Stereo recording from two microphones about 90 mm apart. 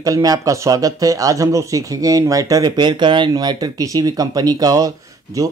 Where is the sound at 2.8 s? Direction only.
60° right (ahead or behind).